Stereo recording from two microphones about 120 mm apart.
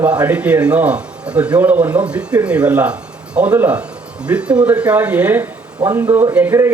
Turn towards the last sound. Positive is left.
turn(degrees=-20)  # may be behind; listen again after turning